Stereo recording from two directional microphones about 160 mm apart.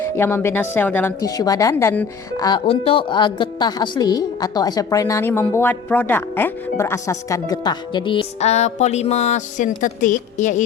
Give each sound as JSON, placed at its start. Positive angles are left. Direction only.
{"t": 0.0, "sound": "a woman's voice", "side_deg": 15}
{"t": 1.2, "sound": "a woman's voice", "side_deg": 20}
{"t": 2.5, "sound": "a woman's voice", "side_deg": 35}